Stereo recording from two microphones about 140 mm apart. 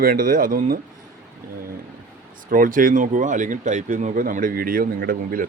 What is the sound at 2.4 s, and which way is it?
Speech, 75° right (ahead or behind).